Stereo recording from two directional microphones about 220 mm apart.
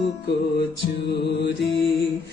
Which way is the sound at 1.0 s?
50° left (ahead or behind).